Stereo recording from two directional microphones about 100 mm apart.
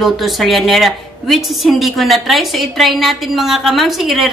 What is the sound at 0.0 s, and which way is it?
A woman's voice, centre (ahead or behind).